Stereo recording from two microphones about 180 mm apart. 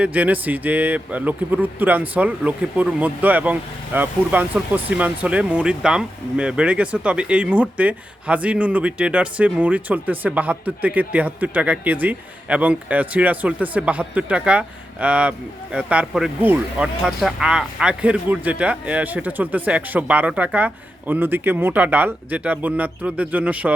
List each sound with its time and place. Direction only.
0.0 s a man's voice: 10° right (ahead or behind)